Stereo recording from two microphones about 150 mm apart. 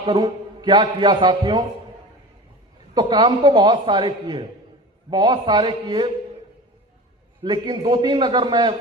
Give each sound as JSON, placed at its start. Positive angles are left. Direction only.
{"t": 0.0, "sound": "a man's voice", "side_deg": -30}
{"t": 2.9, "sound": "a man's voice", "side_deg": -30}
{"t": 7.4, "sound": "a man's voice", "side_deg": -30}